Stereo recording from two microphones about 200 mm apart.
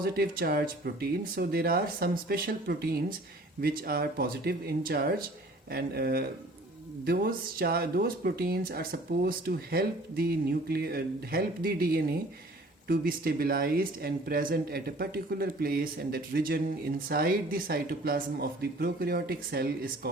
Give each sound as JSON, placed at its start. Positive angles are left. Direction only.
{"t": 0.0, "sound": "speech", "side_deg": -50}